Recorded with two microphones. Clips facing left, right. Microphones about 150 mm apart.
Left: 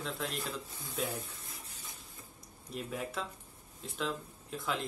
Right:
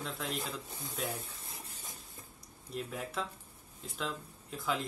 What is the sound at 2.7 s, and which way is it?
Speech, centre (ahead or behind).